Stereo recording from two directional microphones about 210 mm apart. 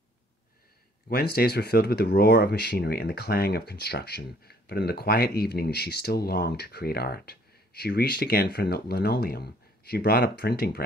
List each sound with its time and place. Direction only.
1.0 s speech: 45° left (ahead or behind)